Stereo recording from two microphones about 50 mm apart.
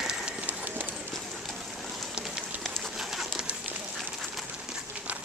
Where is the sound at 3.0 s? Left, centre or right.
Centre.